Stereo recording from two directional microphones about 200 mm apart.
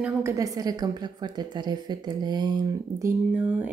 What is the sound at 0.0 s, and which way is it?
A woman's voice, 15° right (ahead or behind).